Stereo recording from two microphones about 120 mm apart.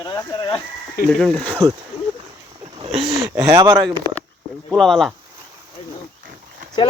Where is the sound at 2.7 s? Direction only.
50° right (ahead or behind).